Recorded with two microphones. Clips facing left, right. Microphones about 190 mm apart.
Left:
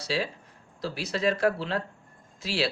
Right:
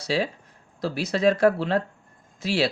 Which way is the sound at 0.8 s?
50° right (ahead or behind).